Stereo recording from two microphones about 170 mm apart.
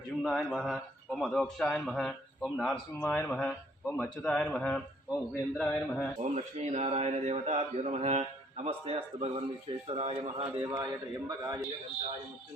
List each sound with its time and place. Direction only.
0.2 s a man's voice: centre (ahead or behind)
6.1 s a man's voice: 40° right (ahead or behind)
10.6 s a man's voice: 20° right (ahead or behind)